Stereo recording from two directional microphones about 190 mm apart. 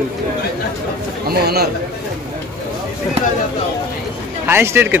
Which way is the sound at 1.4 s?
55° right (ahead or behind).